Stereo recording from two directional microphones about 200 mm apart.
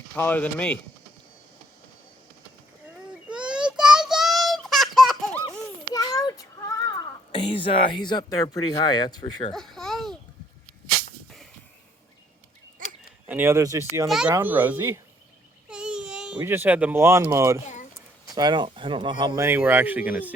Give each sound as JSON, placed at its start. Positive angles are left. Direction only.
{"t": 0.2, "sound": "speech", "side_deg": 10}
{"t": 3.2, "sound": "child singing", "side_deg": -5}
{"t": 4.9, "sound": "baby laughter", "side_deg": 0}
{"t": 5.9, "sound": "a sound", "side_deg": 20}
{"t": 7.5, "sound": "speech", "side_deg": 25}
{"t": 9.6, "sound": "a sound", "side_deg": 0}
{"t": 13.2, "sound": "speech", "side_deg": -10}
{"t": 14.1, "sound": "speech", "side_deg": -5}
{"t": 15.7, "sound": "a sound", "side_deg": -5}
{"t": 16.4, "sound": "speech", "side_deg": -10}
{"t": 19.5, "sound": "speech", "side_deg": -10}